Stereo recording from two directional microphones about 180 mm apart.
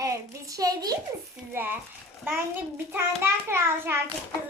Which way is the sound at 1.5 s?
10° right (ahead or behind).